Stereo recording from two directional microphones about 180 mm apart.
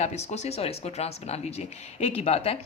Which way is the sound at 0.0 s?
40° left (ahead or behind).